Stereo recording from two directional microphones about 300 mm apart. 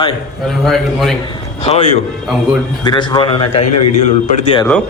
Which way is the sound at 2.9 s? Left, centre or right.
Centre.